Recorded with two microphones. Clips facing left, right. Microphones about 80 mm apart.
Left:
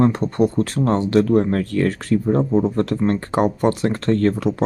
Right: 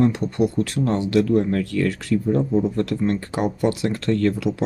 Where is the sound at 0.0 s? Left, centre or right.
Left.